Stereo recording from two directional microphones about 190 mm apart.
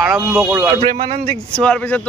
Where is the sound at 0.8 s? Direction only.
30° right (ahead or behind).